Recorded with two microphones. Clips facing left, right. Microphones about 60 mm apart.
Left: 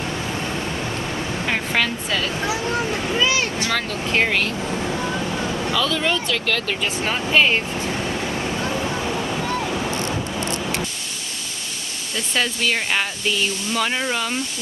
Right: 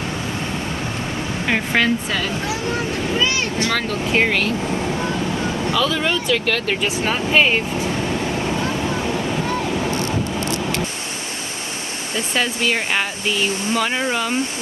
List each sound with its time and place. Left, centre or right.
1.5 s speech: centre
3.7 s speech: centre
5.7 s speech: centre
12.3 s speech: centre